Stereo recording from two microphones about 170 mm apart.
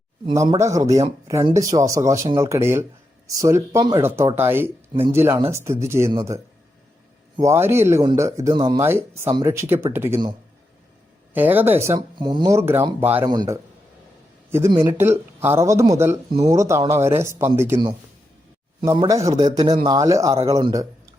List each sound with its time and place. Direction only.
0.3 s speech: 20° right (ahead or behind)
11.3 s speech: 10° right (ahead or behind)
13.2 s speech: 25° right (ahead or behind)
14.8 s speech: 15° right (ahead or behind)
18.9 s speech: 20° right (ahead or behind)